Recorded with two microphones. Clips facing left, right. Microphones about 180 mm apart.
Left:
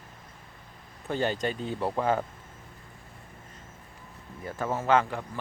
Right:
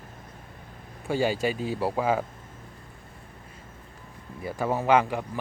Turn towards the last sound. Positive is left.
turn(degrees=-15)  # may be behind; listen again after turning